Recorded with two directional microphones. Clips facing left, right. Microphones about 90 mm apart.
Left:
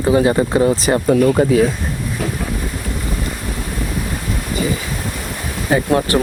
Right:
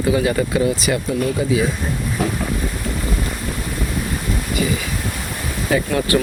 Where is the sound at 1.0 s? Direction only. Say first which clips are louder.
Left 7 dB; 55° left (ahead or behind).